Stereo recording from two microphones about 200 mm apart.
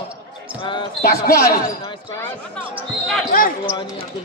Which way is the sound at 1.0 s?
45° left (ahead or behind).